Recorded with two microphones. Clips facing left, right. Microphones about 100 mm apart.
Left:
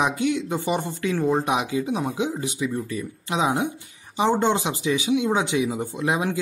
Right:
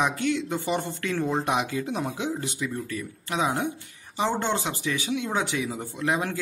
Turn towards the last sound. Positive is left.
turn(degrees=15)  # may be behind; listen again after turning